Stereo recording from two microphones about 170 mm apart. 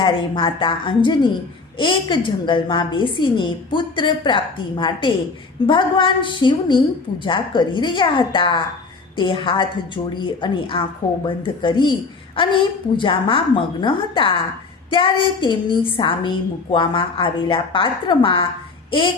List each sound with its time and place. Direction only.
0.0 s a woman's voice: 30° left (ahead or behind)
13.0 s a woman's voice: 30° left (ahead or behind)